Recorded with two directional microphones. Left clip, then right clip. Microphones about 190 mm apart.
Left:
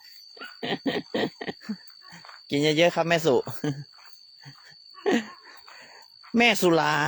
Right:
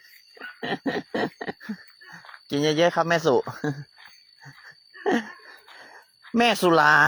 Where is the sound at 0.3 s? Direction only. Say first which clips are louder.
Right 1 dB; 15° left (ahead or behind).